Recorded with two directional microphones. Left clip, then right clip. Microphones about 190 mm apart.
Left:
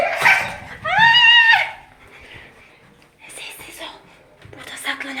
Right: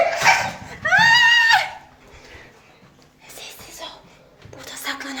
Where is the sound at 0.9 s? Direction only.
5° right (ahead or behind).